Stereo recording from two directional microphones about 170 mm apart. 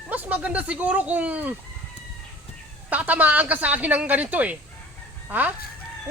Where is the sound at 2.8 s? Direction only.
10° right (ahead or behind).